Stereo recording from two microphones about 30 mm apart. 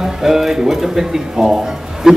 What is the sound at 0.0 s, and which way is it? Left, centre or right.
Speech, centre.